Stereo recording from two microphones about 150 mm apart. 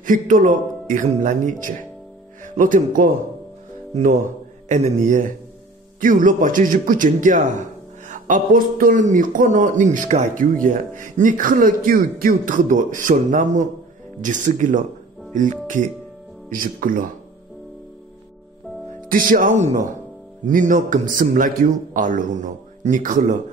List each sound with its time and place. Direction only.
0.0 s speech: 60° right (ahead or behind)
5.9 s speech: 65° right (ahead or behind)
18.9 s speech: 65° right (ahead or behind)